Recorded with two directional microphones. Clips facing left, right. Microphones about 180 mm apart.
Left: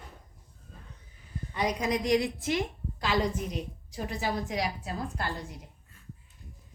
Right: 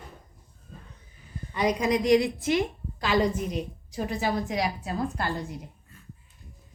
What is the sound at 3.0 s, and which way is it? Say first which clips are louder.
A woman's voice: right 4 dB; 90° right.